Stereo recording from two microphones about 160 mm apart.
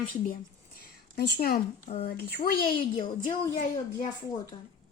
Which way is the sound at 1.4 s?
70° left (ahead or behind).